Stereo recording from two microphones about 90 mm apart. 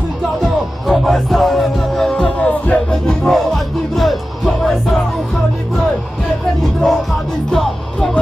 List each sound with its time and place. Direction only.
0.8 s music: centre (ahead or behind)
2.6 s music: 15° left (ahead or behind)
3.3 s music: centre (ahead or behind)
6.6 s music: 5° left (ahead or behind)